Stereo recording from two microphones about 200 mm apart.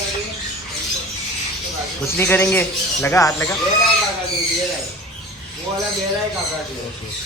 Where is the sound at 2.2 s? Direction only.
10° left (ahead or behind).